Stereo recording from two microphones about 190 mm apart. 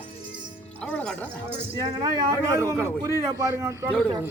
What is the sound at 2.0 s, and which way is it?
A man's voice, 20° right (ahead or behind).